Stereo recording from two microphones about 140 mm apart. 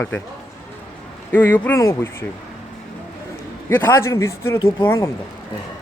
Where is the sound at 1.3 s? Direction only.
10° left (ahead or behind).